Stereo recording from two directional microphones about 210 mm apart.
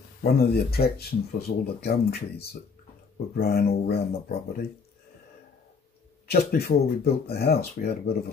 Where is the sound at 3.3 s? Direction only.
50° left (ahead or behind).